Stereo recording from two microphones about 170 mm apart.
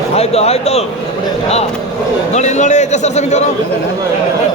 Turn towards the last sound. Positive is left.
turn(degrees=40)  # may be behind; listen again after turning